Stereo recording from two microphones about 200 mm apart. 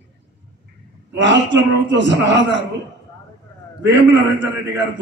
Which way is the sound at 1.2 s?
65° right (ahead or behind).